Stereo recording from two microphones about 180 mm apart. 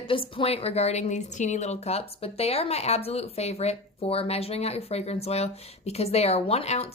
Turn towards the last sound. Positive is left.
turn(degrees=35)  # may be behind; listen again after turning